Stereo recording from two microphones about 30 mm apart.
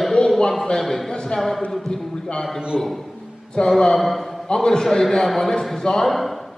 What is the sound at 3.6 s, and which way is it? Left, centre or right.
Speech, left.